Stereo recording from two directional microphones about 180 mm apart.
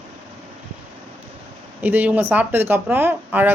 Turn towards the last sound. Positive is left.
turn(degrees=-10)  # may be behind; listen again after turning